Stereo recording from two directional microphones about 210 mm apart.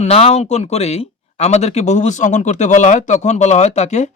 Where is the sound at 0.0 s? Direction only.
30° left (ahead or behind).